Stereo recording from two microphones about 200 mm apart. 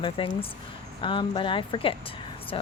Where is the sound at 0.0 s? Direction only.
25° left (ahead or behind).